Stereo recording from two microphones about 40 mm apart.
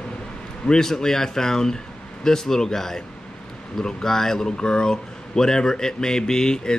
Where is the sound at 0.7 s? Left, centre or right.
Centre.